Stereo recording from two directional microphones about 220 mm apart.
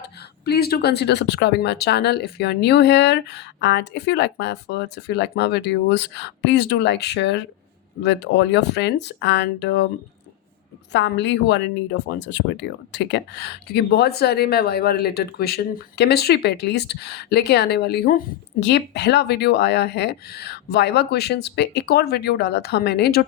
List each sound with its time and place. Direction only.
0.0 s speech: 45° left (ahead or behind)
10.9 s speech: 55° left (ahead or behind)